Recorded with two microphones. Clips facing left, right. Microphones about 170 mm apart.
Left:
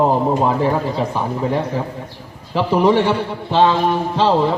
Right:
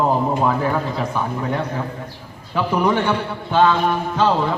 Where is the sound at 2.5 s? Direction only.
30° left (ahead or behind).